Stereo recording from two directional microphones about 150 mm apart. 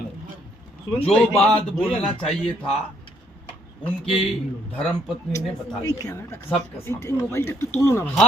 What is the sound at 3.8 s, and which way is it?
Speech, 40° left (ahead or behind).